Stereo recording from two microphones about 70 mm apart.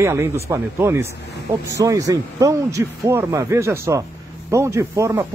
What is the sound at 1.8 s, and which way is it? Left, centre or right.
A man's voice, right.